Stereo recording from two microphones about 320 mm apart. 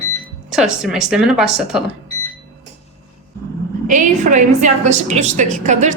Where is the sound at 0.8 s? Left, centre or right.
Centre.